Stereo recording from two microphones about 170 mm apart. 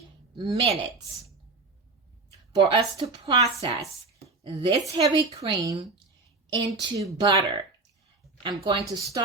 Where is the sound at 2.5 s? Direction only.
25° right (ahead or behind).